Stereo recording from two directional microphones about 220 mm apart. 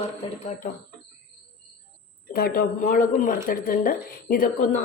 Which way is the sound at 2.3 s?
40° left (ahead or behind).